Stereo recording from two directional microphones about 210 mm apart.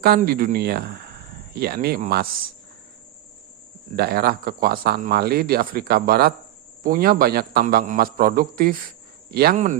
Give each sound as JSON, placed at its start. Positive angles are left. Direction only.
{"t": 0.0, "sound": "speech", "side_deg": -45}
{"t": 3.9, "sound": "speech", "side_deg": -45}